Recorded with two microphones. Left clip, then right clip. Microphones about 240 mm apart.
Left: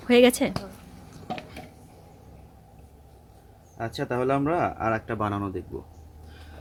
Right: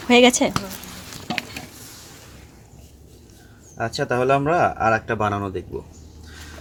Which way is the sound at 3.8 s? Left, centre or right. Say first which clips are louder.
Right 6 dB; centre.